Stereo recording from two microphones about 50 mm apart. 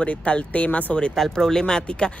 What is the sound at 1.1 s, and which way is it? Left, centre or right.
Speech, centre.